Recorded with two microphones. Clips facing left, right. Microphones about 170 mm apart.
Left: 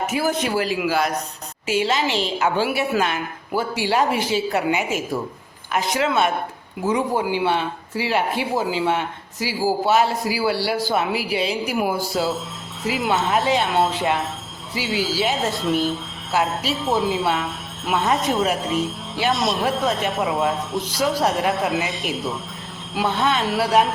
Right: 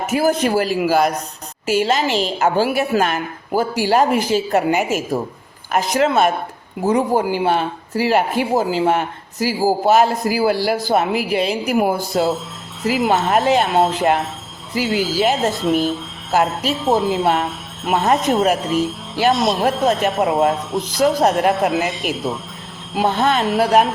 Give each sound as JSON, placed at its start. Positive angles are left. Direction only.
{"t": 0.1, "sound": "speech", "side_deg": -45}
{"t": 12.8, "sound": "speech", "side_deg": 0}
{"t": 17.4, "sound": "jingle bell", "side_deg": 0}
{"t": 18.1, "sound": "speech", "side_deg": 0}
{"t": 23.1, "sound": "speech", "side_deg": -50}
{"t": 23.4, "sound": "speech", "side_deg": 0}